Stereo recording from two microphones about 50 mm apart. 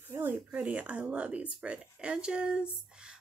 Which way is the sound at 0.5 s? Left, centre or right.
Right.